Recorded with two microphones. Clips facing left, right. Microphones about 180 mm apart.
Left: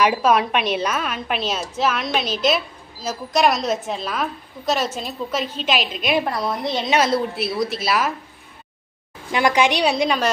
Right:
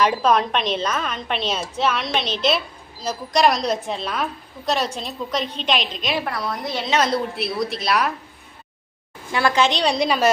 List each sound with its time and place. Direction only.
0.0 s a woman's voice: 10° left (ahead or behind)
6.2 s a woman's voice: 25° left (ahead or behind)
6.9 s a woman's voice: 5° left (ahead or behind)
9.3 s a woman's voice: 15° left (ahead or behind); by 10.2 s centre (ahead or behind)